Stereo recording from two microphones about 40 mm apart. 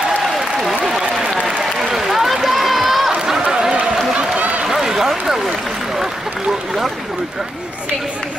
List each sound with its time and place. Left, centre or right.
0.8 s a sound: centre
1.6 s run: centre
4.2 s run: right
4.6 s run: centre